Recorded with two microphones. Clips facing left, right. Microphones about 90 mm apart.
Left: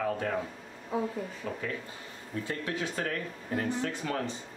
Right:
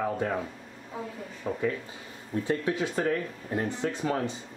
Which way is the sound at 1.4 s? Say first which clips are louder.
Right 8 dB; 20° right (ahead or behind).